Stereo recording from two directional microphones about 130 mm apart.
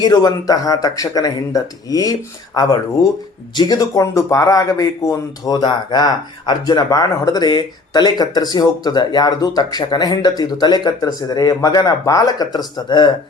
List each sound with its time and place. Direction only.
0.0 s speech: 30° left (ahead or behind)